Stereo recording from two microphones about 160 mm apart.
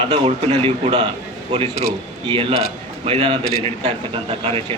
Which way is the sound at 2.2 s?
35° right (ahead or behind).